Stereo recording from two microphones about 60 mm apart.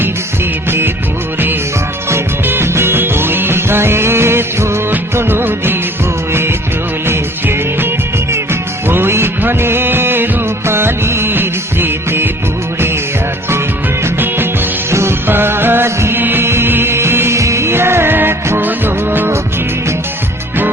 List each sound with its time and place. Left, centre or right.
2.5 s music: right
7.1 s music: right
8.9 s music: right
14.8 s music: right